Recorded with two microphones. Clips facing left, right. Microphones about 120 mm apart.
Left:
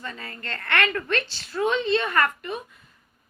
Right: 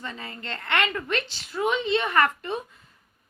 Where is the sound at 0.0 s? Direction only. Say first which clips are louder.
Even; 20° right (ahead or behind).